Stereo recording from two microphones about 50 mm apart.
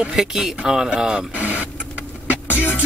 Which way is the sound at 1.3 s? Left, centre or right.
Right.